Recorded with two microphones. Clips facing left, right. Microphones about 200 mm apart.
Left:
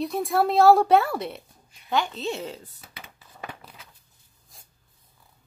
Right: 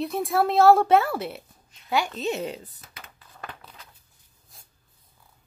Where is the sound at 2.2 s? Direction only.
15° right (ahead or behind).